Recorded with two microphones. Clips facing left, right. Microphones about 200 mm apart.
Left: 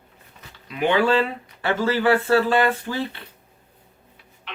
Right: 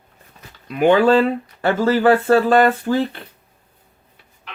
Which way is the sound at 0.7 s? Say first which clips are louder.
Right 6 dB; 45° right (ahead or behind).